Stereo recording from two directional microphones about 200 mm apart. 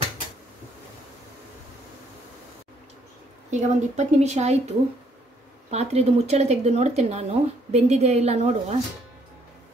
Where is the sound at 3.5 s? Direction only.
35° right (ahead or behind).